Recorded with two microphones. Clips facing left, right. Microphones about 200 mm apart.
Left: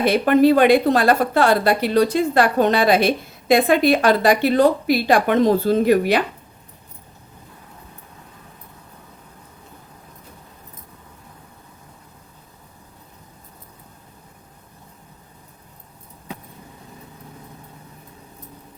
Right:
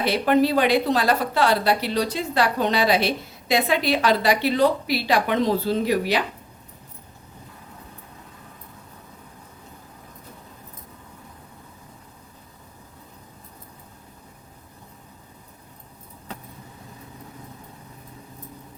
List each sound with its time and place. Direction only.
0.0 s a woman's voice: 50° left (ahead or behind)